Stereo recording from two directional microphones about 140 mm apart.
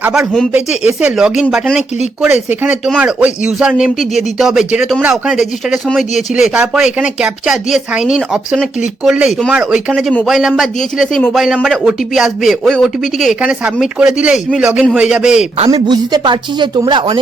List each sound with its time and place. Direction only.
0.0 s speech: 5° right (ahead or behind)
15.5 s speech: 40° right (ahead or behind)
15.9 s speech: 30° right (ahead or behind)